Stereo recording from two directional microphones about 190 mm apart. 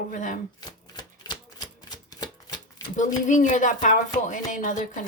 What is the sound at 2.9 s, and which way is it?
A woman's voice, 40° left (ahead or behind).